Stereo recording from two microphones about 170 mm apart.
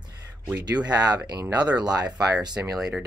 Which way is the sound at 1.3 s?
25° right (ahead or behind).